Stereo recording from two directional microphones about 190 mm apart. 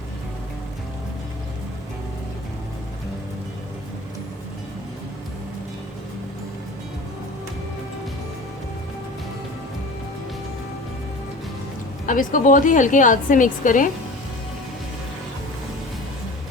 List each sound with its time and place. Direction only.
12.0 s a woman's voice: 45° left (ahead or behind)